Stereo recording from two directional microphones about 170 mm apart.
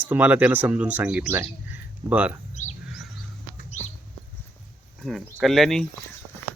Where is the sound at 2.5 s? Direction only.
40° left (ahead or behind).